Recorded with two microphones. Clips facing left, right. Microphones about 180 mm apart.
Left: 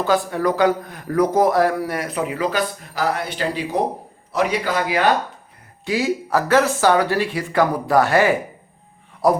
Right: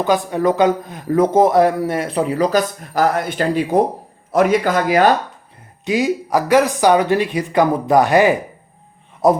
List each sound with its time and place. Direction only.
0.0 s a man's voice: 20° right (ahead or behind); by 5.0 s 45° right (ahead or behind)
5.8 s a man's voice: 20° right (ahead or behind)